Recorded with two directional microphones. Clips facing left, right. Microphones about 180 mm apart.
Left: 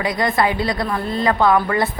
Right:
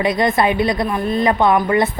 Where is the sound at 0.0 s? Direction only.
20° right (ahead or behind).